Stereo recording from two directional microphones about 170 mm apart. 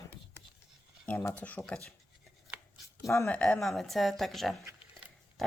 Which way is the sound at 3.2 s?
5° left (ahead or behind).